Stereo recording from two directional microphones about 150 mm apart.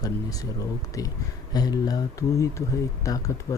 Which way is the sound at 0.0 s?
25° left (ahead or behind).